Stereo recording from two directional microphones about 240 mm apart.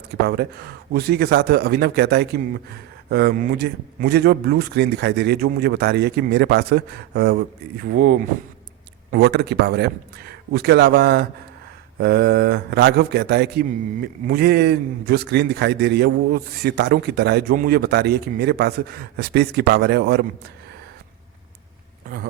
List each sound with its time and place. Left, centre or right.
0.3 s a man's voice: right
9.1 s a man's voice: right
22.0 s a sound: right